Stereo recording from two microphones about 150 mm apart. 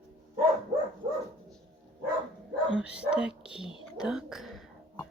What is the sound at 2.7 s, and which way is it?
Speech, 5° right (ahead or behind).